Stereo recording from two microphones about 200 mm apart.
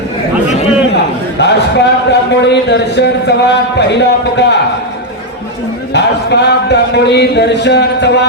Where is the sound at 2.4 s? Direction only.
60° left (ahead or behind).